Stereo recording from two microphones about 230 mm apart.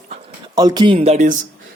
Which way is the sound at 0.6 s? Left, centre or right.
Centre.